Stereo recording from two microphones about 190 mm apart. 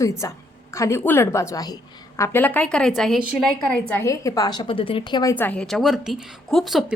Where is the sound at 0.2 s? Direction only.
15° left (ahead or behind); by 3.5 s 5° right (ahead or behind).